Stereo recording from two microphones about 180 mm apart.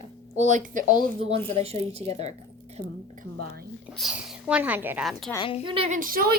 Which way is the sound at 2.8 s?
50° left (ahead or behind).